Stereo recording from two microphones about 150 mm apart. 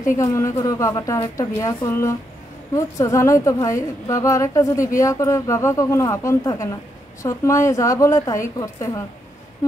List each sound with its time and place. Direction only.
0.1 s a woman's voice: 20° left (ahead or behind)